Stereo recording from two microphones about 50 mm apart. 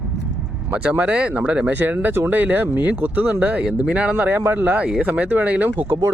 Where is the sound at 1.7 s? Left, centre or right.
Right.